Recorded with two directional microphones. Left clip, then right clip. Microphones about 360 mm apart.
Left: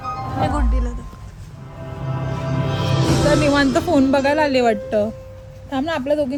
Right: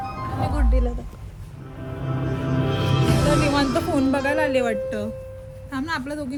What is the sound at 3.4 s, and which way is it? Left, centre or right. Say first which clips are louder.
Music: left 5 dB; left.